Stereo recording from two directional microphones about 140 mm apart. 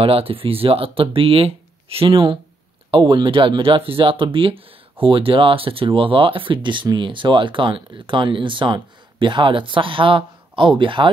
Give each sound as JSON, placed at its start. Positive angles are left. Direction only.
{"t": 0.0, "sound": "speech", "side_deg": -40}